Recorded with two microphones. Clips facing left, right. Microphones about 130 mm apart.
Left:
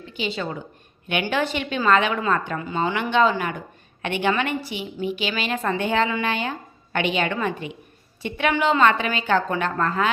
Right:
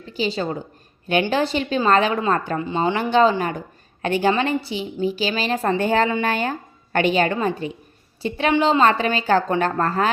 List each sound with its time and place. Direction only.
0.0 s a woman's voice: 35° right (ahead or behind)